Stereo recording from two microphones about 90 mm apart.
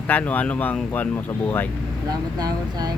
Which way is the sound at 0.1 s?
20° left (ahead or behind).